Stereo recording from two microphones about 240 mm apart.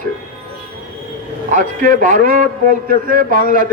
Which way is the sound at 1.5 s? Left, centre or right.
Right.